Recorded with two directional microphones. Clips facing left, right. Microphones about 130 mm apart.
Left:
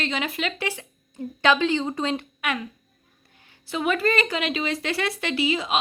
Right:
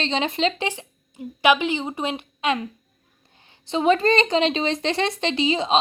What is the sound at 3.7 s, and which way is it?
Speech, 25° right (ahead or behind).